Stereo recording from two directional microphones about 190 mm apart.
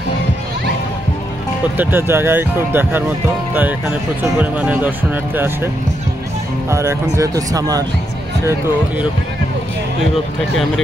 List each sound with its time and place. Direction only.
1.8 s speech: 10° right (ahead or behind)
4.2 s speech: 10° right (ahead or behind)
6.7 s speech: 15° right (ahead or behind)